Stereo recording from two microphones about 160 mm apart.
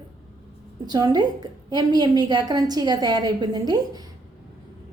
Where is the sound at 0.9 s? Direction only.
25° right (ahead or behind).